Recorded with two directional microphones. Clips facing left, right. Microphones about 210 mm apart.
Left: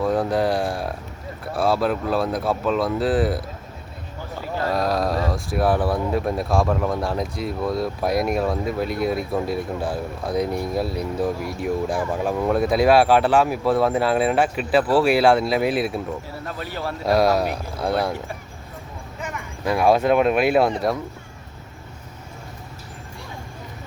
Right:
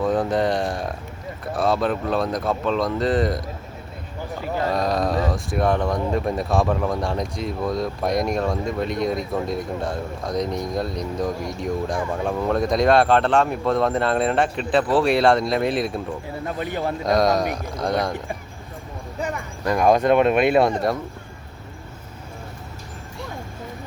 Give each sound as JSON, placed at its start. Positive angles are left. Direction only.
{"t": 0.0, "sound": "speech", "side_deg": 0}
{"t": 4.7, "sound": "speech", "side_deg": 0}
{"t": 16.6, "sound": "a man's voice", "side_deg": -15}
{"t": 17.0, "sound": "speech", "side_deg": 5}
{"t": 19.6, "sound": "speech", "side_deg": 5}